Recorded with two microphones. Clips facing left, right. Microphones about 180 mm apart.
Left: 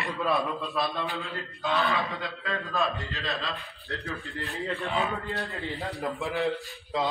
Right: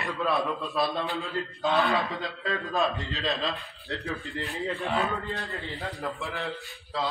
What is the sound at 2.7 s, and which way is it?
Speech, 20° right (ahead or behind).